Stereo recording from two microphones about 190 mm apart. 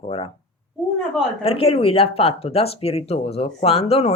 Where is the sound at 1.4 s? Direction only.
30° left (ahead or behind).